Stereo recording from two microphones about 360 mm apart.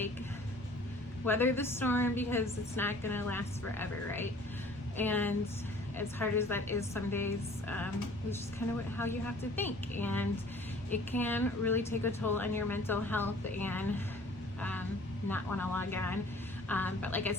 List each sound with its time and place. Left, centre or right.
1.2 s a woman's voice: centre
9.6 s a woman's voice: centre
15.3 s a woman's voice: centre